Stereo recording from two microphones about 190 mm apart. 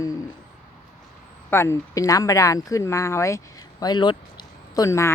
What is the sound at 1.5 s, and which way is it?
Speech, 15° left (ahead or behind).